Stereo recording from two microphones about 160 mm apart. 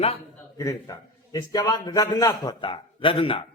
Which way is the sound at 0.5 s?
20° left (ahead or behind).